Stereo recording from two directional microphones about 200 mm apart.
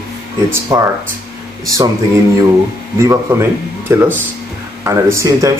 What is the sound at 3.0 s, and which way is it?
Speech, 15° right (ahead or behind).